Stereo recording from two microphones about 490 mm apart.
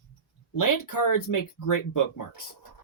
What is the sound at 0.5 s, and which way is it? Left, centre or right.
Speech, left.